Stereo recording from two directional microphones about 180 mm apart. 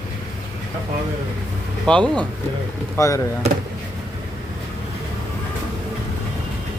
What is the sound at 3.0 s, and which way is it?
Speech, 15° left (ahead or behind).